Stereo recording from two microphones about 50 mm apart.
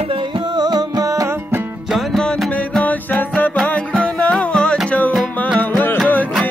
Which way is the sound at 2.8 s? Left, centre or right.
Left.